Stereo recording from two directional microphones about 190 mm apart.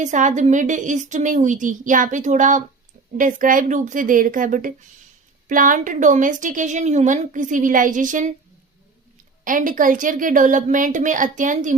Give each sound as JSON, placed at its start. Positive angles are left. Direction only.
{"t": 0.0, "sound": "a woman's voice", "side_deg": -40}
{"t": 9.4, "sound": "a woman's voice", "side_deg": -45}